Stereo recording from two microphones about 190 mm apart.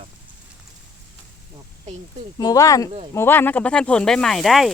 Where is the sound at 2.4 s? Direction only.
20° left (ahead or behind).